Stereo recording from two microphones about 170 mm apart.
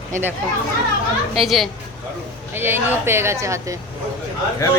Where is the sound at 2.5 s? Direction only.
15° right (ahead or behind).